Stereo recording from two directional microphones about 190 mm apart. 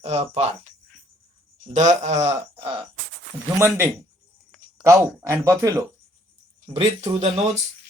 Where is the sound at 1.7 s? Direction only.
40° right (ahead or behind).